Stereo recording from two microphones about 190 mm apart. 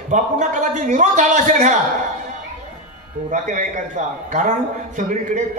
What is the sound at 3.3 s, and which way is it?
A man's voice, 40° right (ahead or behind).